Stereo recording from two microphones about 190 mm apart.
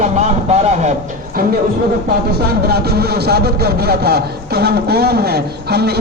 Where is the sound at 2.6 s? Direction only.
55° right (ahead or behind).